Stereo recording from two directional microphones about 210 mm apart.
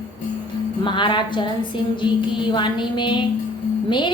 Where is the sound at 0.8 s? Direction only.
20° left (ahead or behind).